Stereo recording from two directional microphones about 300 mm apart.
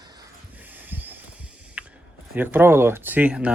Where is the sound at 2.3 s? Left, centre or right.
Centre.